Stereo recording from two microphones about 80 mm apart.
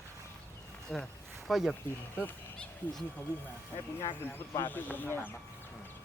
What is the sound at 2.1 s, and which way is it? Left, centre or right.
Speech, left.